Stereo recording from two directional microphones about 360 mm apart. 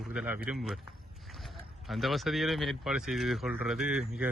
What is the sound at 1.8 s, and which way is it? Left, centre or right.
A man's voice, centre.